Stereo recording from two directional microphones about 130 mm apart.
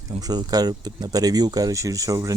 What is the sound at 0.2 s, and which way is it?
Speech, 30° right (ahead or behind).